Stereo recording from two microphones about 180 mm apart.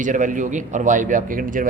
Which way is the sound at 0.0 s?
45° right (ahead or behind).